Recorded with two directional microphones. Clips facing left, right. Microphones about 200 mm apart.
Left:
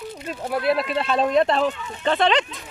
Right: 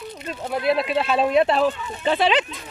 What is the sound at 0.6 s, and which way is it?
Speech, centre (ahead or behind).